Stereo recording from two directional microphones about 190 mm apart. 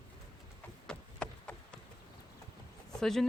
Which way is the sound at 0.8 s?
5° left (ahead or behind).